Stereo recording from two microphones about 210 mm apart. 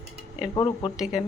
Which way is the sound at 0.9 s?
5° right (ahead or behind).